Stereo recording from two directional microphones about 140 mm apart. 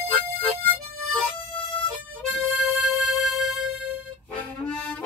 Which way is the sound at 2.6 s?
5° right (ahead or behind).